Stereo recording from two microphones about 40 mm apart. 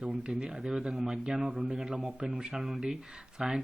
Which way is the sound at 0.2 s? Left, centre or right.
Right.